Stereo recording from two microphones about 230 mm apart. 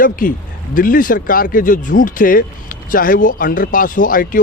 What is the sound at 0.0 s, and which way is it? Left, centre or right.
Speech, left.